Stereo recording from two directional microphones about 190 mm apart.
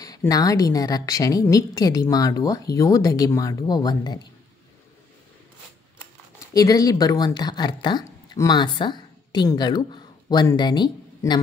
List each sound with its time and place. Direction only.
0.0 s a woman's voice: 20° left (ahead or behind)
5.9 s speech: 15° left (ahead or behind)